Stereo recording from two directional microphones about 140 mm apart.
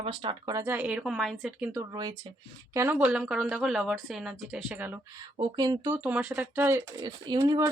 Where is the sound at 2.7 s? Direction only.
15° right (ahead or behind).